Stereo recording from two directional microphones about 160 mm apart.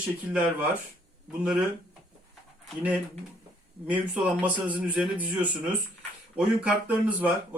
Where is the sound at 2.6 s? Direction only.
10° right (ahead or behind).